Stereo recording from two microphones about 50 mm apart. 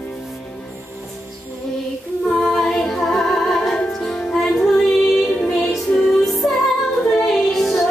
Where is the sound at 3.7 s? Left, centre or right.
Centre.